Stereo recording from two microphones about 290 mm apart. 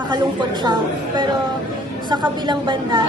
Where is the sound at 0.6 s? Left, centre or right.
Centre.